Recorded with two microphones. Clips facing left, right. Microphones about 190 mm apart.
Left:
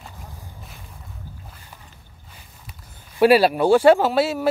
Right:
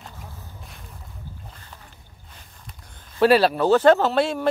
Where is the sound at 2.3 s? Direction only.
5° left (ahead or behind).